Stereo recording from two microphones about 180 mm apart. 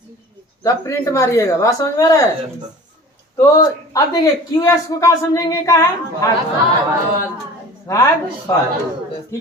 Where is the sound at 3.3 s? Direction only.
15° left (ahead or behind).